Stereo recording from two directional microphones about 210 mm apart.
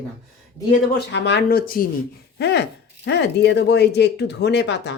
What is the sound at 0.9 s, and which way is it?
Speech, 55° left (ahead or behind).